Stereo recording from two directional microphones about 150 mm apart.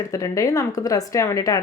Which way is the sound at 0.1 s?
20° left (ahead or behind).